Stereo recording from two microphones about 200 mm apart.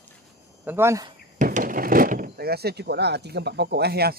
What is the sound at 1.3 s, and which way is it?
Speech, 40° right (ahead or behind).